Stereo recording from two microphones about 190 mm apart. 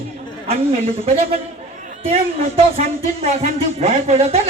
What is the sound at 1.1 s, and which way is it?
Speech, 30° right (ahead or behind).